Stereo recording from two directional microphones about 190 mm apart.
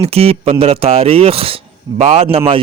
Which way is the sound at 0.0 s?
30° right (ahead or behind).